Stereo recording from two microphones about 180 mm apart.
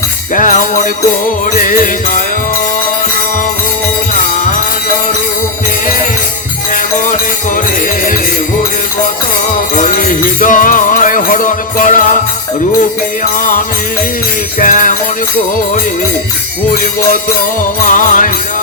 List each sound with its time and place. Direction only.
0.3 s music: 45° left (ahead or behind)
9.7 s music: 50° left (ahead or behind)
14.6 s music: 45° left (ahead or behind)
17.8 s music: 45° left (ahead or behind)